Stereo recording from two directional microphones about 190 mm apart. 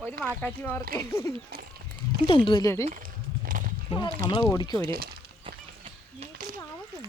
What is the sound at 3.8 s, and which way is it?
Speech, 25° left (ahead or behind).